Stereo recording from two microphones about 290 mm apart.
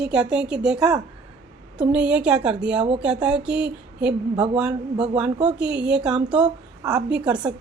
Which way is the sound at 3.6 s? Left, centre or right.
Right.